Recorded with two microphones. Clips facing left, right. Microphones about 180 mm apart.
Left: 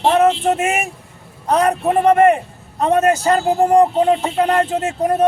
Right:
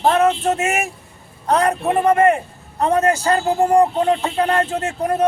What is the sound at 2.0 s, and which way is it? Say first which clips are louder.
A man's voice: left 3 dB; 20° left (ahead or behind).